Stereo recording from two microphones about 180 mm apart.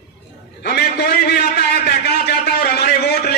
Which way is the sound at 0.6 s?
65° left (ahead or behind).